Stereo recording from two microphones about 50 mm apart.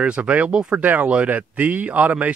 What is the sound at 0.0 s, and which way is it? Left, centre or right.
Speech, right.